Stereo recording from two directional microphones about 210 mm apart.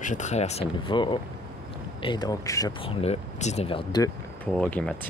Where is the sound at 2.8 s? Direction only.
30° left (ahead or behind).